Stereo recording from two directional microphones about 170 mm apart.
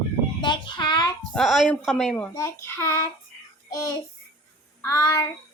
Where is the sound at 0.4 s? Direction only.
30° left (ahead or behind).